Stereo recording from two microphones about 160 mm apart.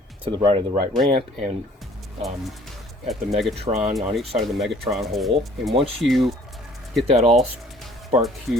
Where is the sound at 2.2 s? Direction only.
Centre (ahead or behind).